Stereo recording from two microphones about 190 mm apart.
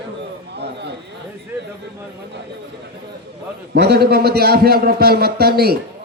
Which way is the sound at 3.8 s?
55° right (ahead or behind).